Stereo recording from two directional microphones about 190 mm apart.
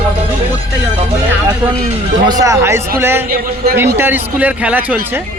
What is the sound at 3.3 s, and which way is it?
Speech, 50° right (ahead or behind).